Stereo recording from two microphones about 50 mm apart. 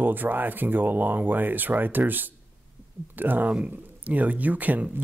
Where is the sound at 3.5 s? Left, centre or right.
Right.